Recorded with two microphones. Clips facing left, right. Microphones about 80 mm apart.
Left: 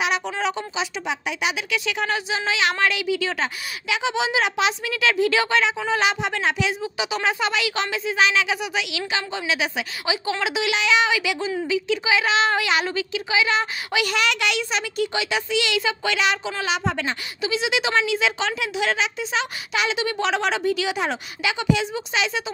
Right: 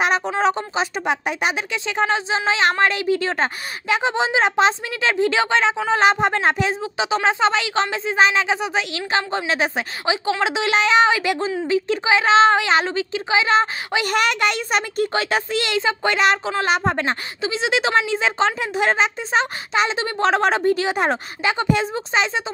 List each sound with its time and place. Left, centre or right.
0.0 s a woman's voice: right